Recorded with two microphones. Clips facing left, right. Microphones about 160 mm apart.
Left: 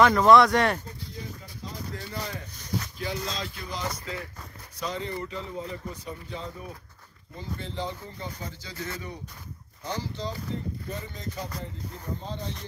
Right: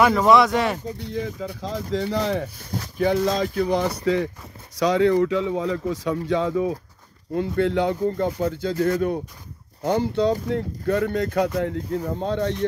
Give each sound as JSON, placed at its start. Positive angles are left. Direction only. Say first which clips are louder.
{"t": 0.0, "sound": "speech", "louder": "right 1 dB", "side_deg": -5}
{"t": 0.9, "sound": "speech", "louder": "right 12 dB", "side_deg": -80}
{"t": 3.0, "sound": "speech", "louder": "right 13 dB", "side_deg": -60}
{"t": 7.3, "sound": "speech", "louder": "right 14 dB", "side_deg": -70}
{"t": 10.5, "sound": "speech", "louder": "right 11 dB", "side_deg": -75}